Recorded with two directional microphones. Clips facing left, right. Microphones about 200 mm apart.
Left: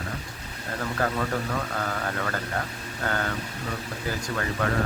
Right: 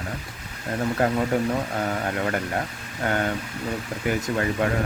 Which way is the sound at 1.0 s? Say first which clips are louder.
Right 5 dB; 25° right (ahead or behind).